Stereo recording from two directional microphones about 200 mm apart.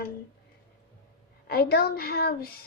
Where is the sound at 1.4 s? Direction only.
50° left (ahead or behind).